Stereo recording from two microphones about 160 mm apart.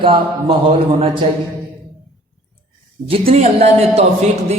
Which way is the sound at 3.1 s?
40° right (ahead or behind).